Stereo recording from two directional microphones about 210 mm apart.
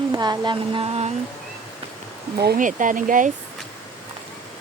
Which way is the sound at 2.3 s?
45° right (ahead or behind).